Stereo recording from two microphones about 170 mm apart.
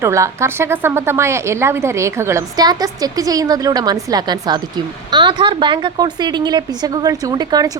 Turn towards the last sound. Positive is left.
turn(degrees=-25)  # may be behind; listen again after turning